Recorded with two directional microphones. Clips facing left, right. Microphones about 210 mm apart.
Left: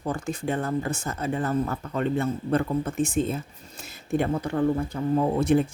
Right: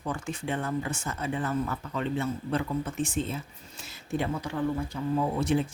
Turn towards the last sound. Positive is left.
turn(degrees=55)  # may be behind; listen again after turning